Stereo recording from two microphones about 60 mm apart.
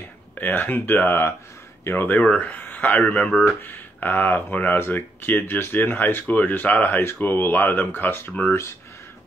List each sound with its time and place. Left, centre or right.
0.4 s speech: left